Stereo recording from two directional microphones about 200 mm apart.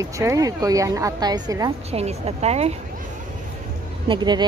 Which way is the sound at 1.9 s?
30° right (ahead or behind).